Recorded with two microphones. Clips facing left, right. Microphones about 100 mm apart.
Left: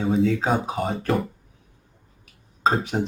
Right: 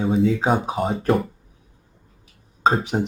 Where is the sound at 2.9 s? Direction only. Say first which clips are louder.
Right 2 dB; 25° right (ahead or behind).